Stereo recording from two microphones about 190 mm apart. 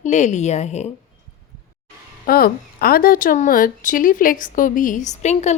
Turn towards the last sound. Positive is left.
turn(degrees=35)  # may be behind; listen again after turning